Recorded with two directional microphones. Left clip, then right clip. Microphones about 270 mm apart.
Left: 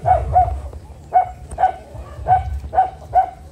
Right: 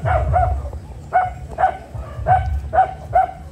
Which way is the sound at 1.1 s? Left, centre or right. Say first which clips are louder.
Left 1 dB; left.